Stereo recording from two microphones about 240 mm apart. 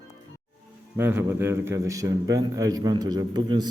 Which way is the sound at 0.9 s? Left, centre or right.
Centre.